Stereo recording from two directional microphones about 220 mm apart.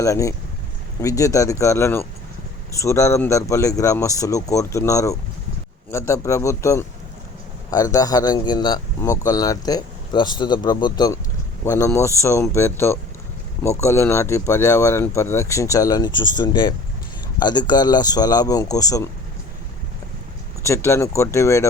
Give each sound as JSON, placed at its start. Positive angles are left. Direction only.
{"t": 0.0, "sound": "a man's voice", "side_deg": 15}
{"t": 20.7, "sound": "a man's voice", "side_deg": 10}